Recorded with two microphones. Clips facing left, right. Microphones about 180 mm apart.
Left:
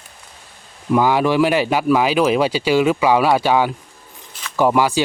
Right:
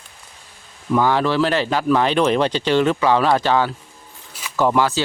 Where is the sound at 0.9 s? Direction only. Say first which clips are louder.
Left 2 dB; 10° left (ahead or behind).